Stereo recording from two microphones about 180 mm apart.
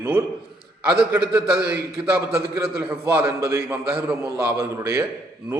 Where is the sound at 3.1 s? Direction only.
15° right (ahead or behind).